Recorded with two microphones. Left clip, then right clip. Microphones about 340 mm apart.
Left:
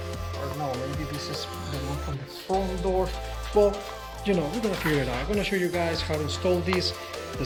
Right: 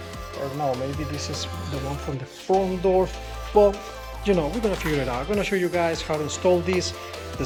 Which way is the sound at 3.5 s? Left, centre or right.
Centre.